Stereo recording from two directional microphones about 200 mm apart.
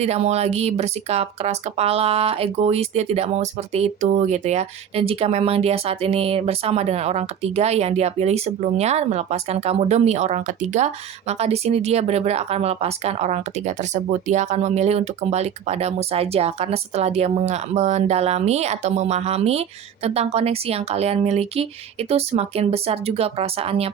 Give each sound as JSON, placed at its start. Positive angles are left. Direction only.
{"t": 0.0, "sound": "speech", "side_deg": -30}